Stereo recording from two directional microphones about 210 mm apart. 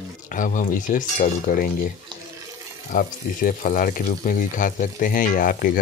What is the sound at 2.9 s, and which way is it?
Speech, 40° left (ahead or behind).